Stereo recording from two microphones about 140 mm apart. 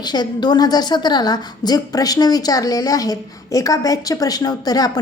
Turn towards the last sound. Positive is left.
turn(degrees=25)  # may be behind; listen again after turning